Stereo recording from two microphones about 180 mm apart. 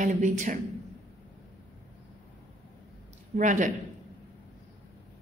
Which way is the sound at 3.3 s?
45° right (ahead or behind).